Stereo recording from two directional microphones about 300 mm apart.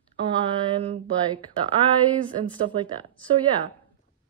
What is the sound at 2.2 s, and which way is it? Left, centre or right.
A woman's voice, centre.